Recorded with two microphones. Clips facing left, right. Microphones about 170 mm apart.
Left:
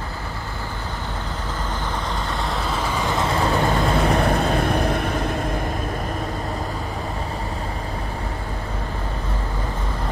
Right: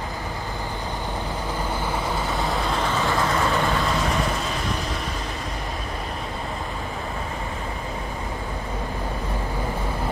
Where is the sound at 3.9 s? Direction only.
60° left (ahead or behind).